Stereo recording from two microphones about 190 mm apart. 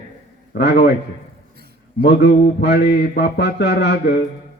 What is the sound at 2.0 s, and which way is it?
Speech, 60° left (ahead or behind).